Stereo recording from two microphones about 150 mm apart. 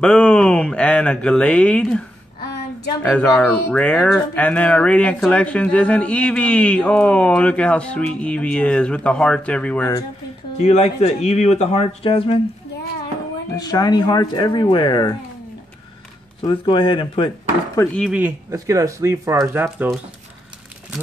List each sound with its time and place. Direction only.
0.0 s speech: 5° left (ahead or behind)
10.6 s speech: 45° left (ahead or behind)
13.6 s speech: 25° left (ahead or behind)
16.4 s speech: 35° left (ahead or behind)
17.8 s speech: 20° left (ahead or behind)
18.1 s speech: 15° right (ahead or behind)